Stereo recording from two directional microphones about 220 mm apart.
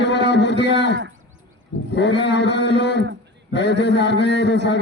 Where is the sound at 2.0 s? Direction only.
50° left (ahead or behind).